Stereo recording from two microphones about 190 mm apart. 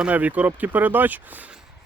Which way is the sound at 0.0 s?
10° right (ahead or behind).